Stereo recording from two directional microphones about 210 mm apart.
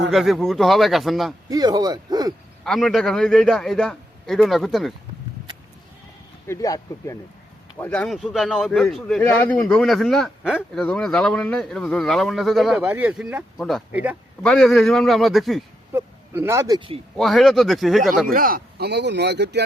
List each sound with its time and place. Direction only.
0.1 s speech: centre (ahead or behind)
1.5 s speech: 20° right (ahead or behind)
2.6 s speech: centre (ahead or behind)
6.5 s speech: 15° left (ahead or behind)
7.8 s speech: 5° left (ahead or behind)
15.9 s speech: 10° right (ahead or behind)
17.2 s speech: centre (ahead or behind)
18.3 s speech: 45° right (ahead or behind)